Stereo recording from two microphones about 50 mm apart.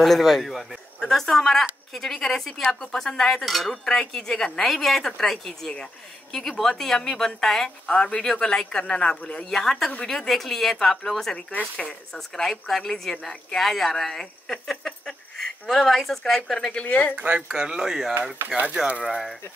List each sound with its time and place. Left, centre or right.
0.0 s a woman's voice: centre
12.4 s a woman's voice: centre
16.7 s speech: left
17.1 s speech: right
17.5 s speech: centre